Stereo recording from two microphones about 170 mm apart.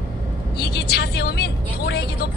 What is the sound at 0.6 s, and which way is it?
Vehicle, 75° left (ahead or behind).